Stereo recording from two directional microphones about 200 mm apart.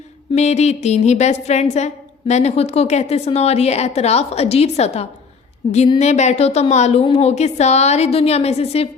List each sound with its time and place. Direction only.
0.3 s a woman's voice: 35° left (ahead or behind)